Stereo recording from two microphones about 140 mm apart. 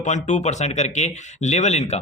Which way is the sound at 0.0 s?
55° left (ahead or behind).